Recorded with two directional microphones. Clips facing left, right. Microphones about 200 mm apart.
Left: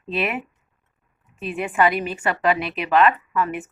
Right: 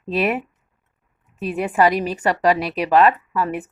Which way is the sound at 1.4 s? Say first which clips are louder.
Right 3 dB; 40° right (ahead or behind).